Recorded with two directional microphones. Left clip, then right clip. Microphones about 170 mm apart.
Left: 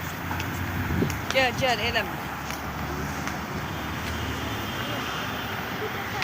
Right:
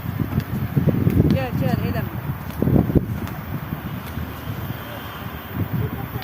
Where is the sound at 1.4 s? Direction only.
60° right (ahead or behind).